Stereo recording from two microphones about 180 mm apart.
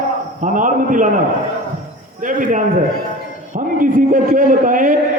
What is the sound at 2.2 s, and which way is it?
A man's voice, 45° right (ahead or behind).